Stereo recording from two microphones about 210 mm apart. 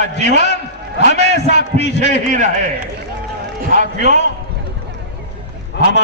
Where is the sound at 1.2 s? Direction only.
50° left (ahead or behind).